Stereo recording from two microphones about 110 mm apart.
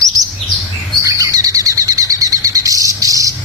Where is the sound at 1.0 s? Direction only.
30° right (ahead or behind).